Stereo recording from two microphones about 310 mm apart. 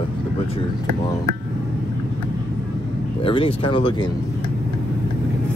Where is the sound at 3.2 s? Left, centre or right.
Centre.